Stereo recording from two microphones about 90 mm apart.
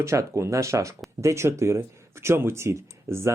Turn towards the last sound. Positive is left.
turn(degrees=-30)  # may be behind; listen again after turning